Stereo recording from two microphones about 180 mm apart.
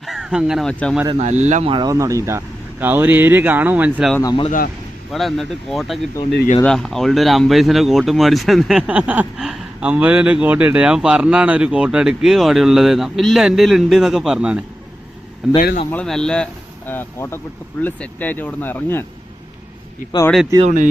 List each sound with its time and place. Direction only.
0.0 s speech: 5° right (ahead or behind)
1.2 s speech: 40° right (ahead or behind)
1.7 s speech: 20° right (ahead or behind)
4.2 s speech: 25° left (ahead or behind)
5.1 s speech: centre (ahead or behind)
20.7 s speech: 45° right (ahead or behind)